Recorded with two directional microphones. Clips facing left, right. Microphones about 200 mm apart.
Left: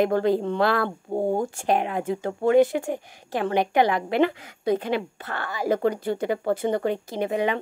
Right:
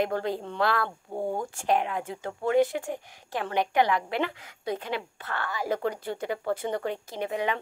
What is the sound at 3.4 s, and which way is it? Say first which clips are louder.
A woman's voice: left 4 dB; 20° left (ahead or behind).